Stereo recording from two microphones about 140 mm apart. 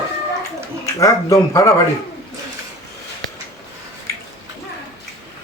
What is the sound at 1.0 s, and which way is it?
Speech, 25° left (ahead or behind).